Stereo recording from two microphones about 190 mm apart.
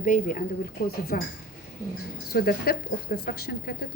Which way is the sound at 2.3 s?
50° left (ahead or behind).